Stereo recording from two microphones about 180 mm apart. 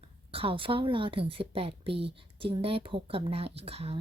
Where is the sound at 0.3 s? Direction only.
30° right (ahead or behind).